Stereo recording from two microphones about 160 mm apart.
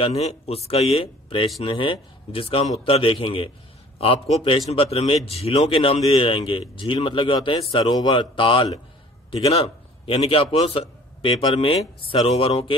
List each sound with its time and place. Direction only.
0.0 s a man's voice: 40° left (ahead or behind)